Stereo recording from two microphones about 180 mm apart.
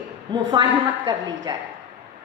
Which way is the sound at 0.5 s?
25° right (ahead or behind).